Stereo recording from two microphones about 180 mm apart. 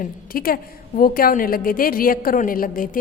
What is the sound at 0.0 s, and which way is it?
A woman's voice, 55° left (ahead or behind).